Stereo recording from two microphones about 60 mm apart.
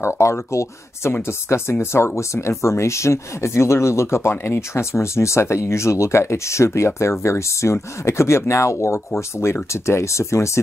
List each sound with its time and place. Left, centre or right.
0.0 s speech: left